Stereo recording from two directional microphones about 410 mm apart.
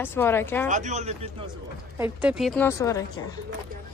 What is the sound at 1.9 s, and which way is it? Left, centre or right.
Speech, centre.